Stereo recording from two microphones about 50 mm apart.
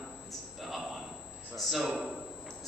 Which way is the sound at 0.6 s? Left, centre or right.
Centre.